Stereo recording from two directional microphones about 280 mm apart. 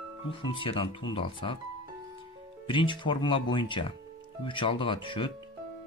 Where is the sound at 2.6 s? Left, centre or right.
Centre.